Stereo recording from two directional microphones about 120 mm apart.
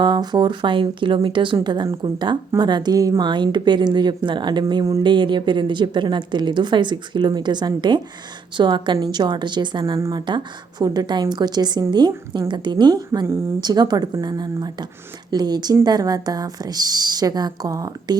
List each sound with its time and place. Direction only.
0.0 s a woman's voice: 35° right (ahead or behind)
9.8 s a woman's voice: 30° right (ahead or behind)